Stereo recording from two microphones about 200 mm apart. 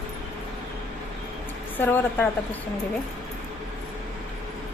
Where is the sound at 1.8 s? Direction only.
10° left (ahead or behind).